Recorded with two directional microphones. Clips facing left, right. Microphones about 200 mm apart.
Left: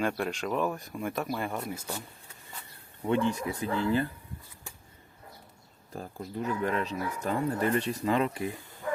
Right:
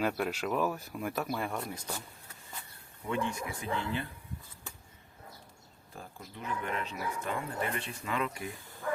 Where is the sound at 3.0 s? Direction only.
30° left (ahead or behind).